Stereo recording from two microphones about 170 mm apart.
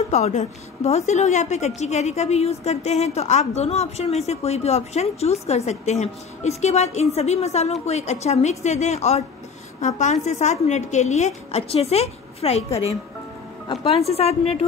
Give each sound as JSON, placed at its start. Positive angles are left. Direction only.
{"t": 0.1, "sound": "a woman's voice", "side_deg": 45}